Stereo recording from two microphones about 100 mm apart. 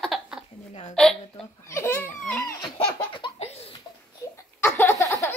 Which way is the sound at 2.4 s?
40° left (ahead or behind).